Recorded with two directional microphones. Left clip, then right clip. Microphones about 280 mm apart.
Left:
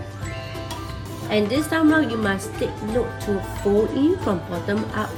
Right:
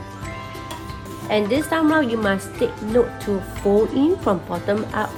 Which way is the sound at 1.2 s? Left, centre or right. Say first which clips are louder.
Right 2 dB; right.